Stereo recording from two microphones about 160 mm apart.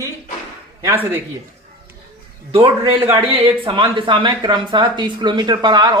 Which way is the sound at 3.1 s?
35° right (ahead or behind).